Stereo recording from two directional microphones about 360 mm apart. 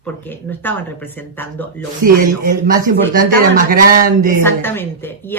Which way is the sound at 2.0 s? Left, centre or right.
Right.